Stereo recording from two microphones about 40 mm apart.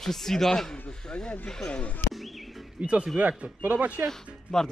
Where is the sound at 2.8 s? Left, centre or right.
Right.